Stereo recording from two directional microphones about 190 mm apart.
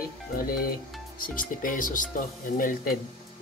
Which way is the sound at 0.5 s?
50° left (ahead or behind).